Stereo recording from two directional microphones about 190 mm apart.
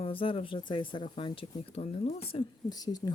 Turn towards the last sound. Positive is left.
turn(degrees=20)  # may be behind; listen again after turning